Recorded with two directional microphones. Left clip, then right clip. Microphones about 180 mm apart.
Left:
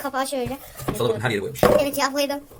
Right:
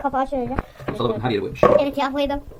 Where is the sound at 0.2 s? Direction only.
Centre (ahead or behind).